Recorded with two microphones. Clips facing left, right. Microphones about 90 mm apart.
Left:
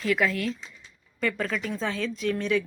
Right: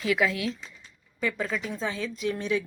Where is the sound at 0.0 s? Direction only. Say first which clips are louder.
Even; 50° left (ahead or behind).